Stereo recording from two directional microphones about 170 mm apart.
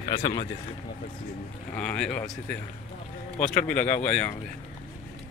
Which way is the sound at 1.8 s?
5° left (ahead or behind).